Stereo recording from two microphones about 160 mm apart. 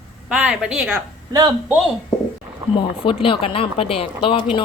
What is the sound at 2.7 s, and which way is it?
Speech, 30° left (ahead or behind).